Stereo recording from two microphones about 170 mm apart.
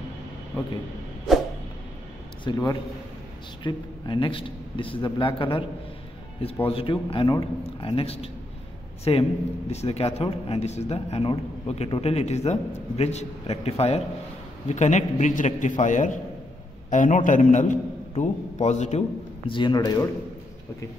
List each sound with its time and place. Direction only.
2.4 s a man's voice: 25° left (ahead or behind)